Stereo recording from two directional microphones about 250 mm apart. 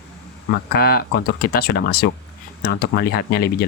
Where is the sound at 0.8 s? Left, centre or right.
Left.